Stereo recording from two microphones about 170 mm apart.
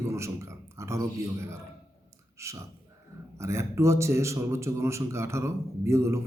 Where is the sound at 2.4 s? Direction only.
15° right (ahead or behind).